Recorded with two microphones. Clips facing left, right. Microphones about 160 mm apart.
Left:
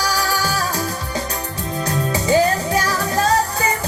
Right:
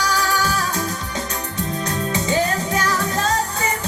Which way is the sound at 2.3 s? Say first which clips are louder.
Left 6 dB; 35° left (ahead or behind).